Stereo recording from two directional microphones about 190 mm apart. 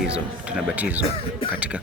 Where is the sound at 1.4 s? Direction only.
30° left (ahead or behind).